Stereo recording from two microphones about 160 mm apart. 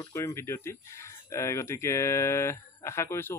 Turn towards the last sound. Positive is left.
turn(degrees=15)  # may be behind; listen again after turning